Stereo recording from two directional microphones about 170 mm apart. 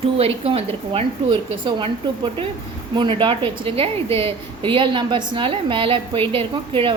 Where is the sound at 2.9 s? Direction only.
30° right (ahead or behind).